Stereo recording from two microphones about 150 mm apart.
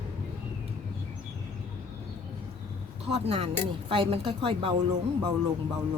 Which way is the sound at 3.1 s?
40° right (ahead or behind).